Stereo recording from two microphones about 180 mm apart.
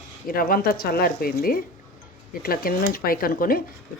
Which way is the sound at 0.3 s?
55° left (ahead or behind).